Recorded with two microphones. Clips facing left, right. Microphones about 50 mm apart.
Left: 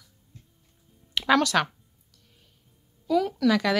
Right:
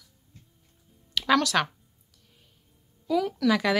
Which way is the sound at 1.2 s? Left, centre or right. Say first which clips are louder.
Left 1 dB; centre.